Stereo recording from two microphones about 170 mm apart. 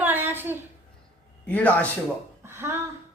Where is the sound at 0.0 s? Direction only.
10° right (ahead or behind).